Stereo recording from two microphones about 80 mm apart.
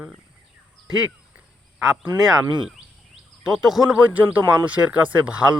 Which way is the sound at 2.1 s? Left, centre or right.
Centre.